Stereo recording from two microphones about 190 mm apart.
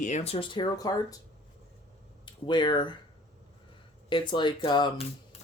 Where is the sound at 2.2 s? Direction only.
25° left (ahead or behind).